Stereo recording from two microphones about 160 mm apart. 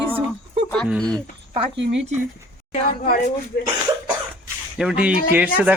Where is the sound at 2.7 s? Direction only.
60° left (ahead or behind).